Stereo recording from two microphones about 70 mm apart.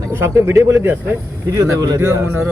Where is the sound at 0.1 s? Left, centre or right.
Right.